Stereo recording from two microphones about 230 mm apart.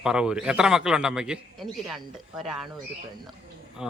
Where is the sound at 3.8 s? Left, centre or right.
Centre.